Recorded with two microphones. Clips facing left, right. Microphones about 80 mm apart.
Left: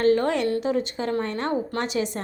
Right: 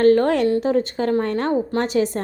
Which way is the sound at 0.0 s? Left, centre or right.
Right.